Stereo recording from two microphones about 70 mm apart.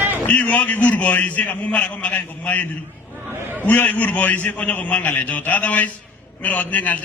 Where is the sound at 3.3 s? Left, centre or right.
Right.